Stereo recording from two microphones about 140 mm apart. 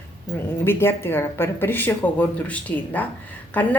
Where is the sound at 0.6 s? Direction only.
15° left (ahead or behind).